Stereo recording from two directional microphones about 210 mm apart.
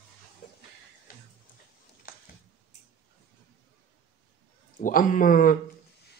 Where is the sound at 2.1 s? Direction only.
45° left (ahead or behind).